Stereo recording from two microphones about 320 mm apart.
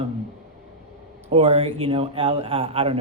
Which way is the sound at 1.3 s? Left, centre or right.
Centre.